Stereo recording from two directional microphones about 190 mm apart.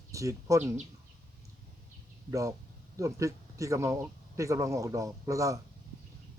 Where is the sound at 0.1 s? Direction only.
15° right (ahead or behind).